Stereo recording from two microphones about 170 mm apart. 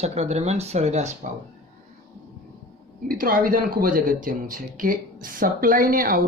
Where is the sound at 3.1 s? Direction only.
55° right (ahead or behind).